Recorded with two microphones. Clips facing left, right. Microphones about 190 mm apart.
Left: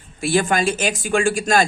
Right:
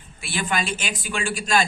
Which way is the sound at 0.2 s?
45° left (ahead or behind).